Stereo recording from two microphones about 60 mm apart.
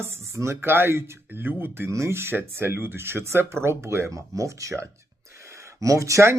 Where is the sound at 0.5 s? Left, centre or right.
Right.